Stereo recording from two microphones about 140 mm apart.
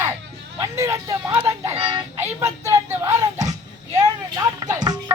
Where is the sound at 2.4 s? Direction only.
20° right (ahead or behind).